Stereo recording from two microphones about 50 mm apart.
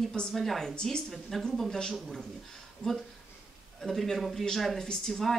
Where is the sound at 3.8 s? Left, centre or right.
Centre.